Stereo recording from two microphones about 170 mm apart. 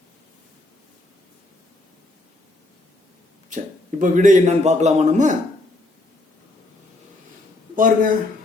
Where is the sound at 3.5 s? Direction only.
50° right (ahead or behind).